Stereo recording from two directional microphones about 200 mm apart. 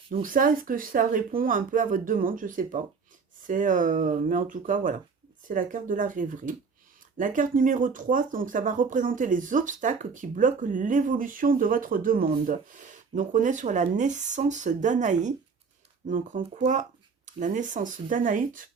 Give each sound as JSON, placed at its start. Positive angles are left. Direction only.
{"t": 0.1, "sound": "speech", "side_deg": -45}